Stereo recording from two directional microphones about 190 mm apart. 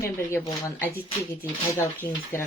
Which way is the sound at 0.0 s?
15° left (ahead or behind).